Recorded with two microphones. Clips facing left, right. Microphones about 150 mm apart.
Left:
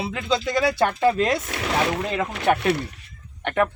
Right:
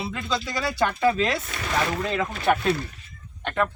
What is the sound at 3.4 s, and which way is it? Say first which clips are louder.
Speech: left 3 dB; 20° left (ahead or behind).